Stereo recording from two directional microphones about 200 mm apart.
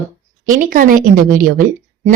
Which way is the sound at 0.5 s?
45° right (ahead or behind).